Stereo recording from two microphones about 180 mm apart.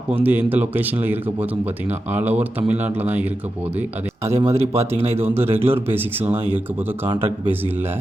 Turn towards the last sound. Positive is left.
turn(degrees=-10)  # may be behind; listen again after turning